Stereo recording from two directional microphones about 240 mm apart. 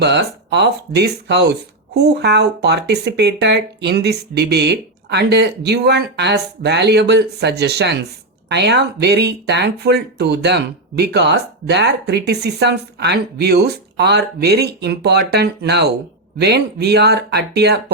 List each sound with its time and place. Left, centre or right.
0.0 s speech: right